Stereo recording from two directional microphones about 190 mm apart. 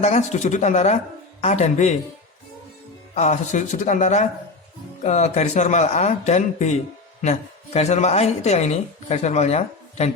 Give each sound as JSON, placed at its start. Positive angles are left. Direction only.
{"t": 0.0, "sound": "speech", "side_deg": 35}
{"t": 3.2, "sound": "speech", "side_deg": 40}